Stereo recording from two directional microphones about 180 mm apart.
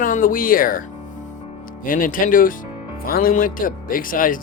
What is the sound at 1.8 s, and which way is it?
Speech, 50° left (ahead or behind).